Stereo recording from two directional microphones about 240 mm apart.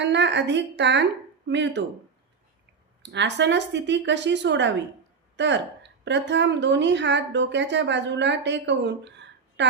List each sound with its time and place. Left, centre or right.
0.0 s a woman's voice: right
3.0 s a woman's voice: right